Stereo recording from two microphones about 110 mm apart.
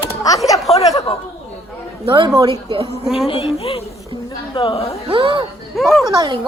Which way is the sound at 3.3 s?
60° left (ahead or behind).